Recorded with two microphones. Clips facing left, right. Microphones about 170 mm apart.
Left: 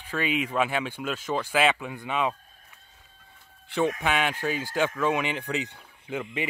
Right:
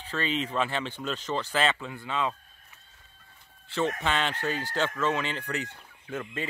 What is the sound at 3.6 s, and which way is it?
Speech, 15° left (ahead or behind).